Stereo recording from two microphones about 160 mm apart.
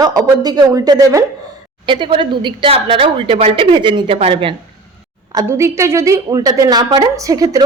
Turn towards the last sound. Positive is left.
turn(degrees=-25)  # may be behind; listen again after turning